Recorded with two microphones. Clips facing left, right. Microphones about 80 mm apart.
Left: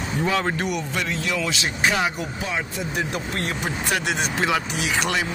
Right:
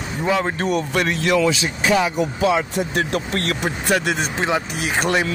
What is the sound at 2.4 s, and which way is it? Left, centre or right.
Speech, right.